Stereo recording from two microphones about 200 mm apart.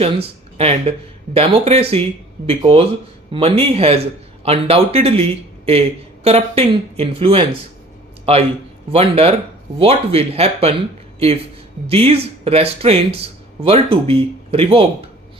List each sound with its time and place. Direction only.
0.0 s speech: 30° right (ahead or behind)